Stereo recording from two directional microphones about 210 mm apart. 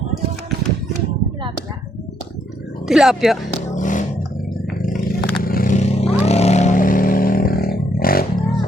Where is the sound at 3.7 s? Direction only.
35° left (ahead or behind).